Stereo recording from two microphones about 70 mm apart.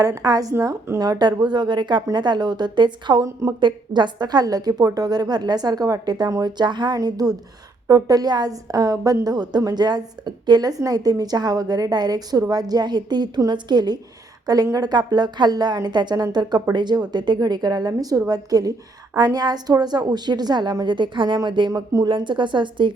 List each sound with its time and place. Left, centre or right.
0.0 s a woman's voice: right
6.4 s a woman's voice: right
9.2 s a woman's voice: right
14.4 s a woman's voice: right
19.1 s a woman's voice: right